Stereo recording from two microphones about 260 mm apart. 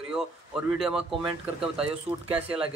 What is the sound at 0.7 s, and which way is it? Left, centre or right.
Speech, centre.